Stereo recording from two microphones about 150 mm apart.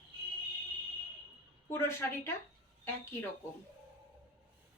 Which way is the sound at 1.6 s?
15° left (ahead or behind).